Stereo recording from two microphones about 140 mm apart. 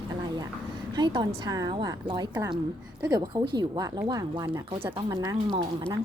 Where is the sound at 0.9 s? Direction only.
30° right (ahead or behind).